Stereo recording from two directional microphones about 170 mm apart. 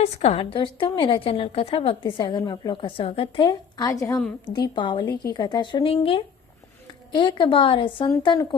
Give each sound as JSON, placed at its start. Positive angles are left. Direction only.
{"t": 0.0, "sound": "a woman's voice", "side_deg": 35}